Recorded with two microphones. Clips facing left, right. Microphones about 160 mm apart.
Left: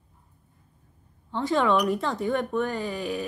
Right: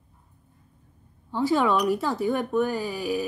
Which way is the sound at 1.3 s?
5° right (ahead or behind).